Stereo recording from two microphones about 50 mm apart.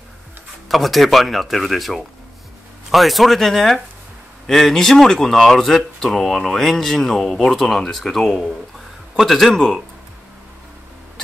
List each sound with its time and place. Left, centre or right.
0.7 s a man's voice: centre